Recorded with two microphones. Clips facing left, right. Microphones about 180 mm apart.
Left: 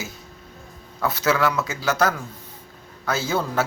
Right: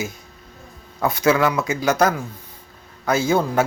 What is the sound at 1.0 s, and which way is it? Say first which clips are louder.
Speech: right 4 dB; 15° right (ahead or behind).